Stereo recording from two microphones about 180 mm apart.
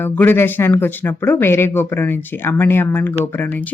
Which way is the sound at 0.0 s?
10° left (ahead or behind).